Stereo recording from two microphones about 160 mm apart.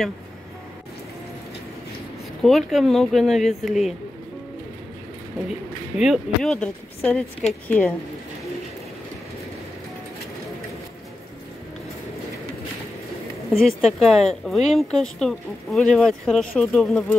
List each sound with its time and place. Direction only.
2.4 s speech: centre (ahead or behind)
5.9 s a woman's voice: centre (ahead or behind)
13.7 s speech: centre (ahead or behind)